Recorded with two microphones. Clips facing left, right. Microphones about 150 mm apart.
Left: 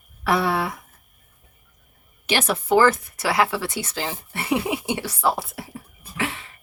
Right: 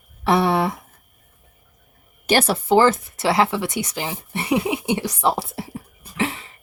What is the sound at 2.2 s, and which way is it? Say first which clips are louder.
Speech: right 4 dB; 40° right (ahead or behind).